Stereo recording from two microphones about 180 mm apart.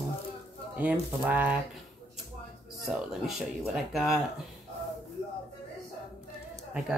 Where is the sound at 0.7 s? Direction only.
10° right (ahead or behind).